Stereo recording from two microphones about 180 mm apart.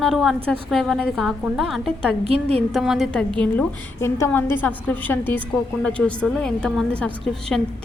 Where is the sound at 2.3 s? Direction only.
35° right (ahead or behind).